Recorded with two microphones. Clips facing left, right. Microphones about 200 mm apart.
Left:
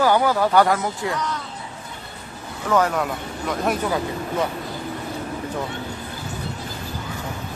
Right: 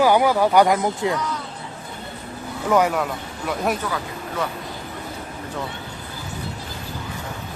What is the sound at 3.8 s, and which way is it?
Speech, 25° left (ahead or behind).